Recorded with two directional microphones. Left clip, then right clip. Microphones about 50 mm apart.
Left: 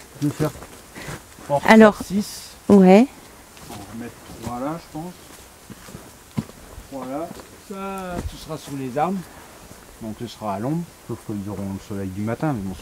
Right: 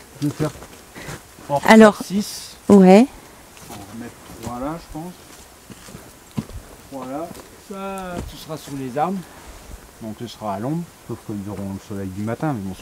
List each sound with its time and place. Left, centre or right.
0.2 s speech: centre
0.6 s a sound: centre
1.5 s speech: right
2.7 s speech: right
4.5 s speech: centre
7.0 s speech: centre
11.6 s speech: centre
12.4 s speech: right